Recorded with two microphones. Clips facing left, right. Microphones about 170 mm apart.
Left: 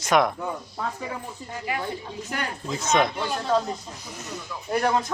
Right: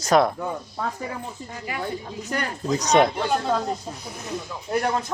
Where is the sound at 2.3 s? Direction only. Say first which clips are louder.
Right 6 dB; 40° right (ahead or behind).